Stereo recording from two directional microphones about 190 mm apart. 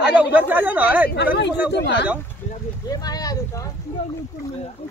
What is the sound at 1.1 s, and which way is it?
Speech, 65° left (ahead or behind).